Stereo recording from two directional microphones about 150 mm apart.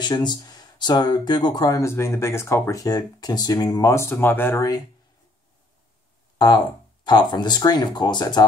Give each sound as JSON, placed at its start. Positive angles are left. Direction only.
{"t": 0.0, "sound": "speech", "side_deg": 30}
{"t": 6.3, "sound": "speech", "side_deg": 30}